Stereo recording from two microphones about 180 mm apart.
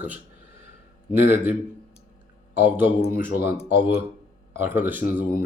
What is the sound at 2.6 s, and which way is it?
Speech, 10° right (ahead or behind).